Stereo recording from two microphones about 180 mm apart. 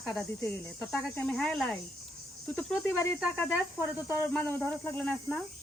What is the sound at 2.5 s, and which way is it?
Speech, 10° left (ahead or behind).